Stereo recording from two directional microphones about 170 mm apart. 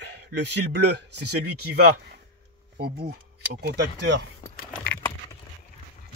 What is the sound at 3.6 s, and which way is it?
Speech, 85° right.